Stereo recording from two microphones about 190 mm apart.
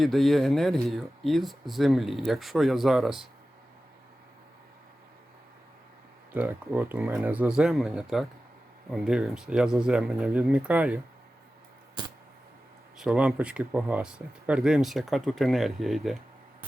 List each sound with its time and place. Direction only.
0.0 s speech: centre (ahead or behind)
6.3 s speech: 10° right (ahead or behind)
13.0 s speech: 5° right (ahead or behind)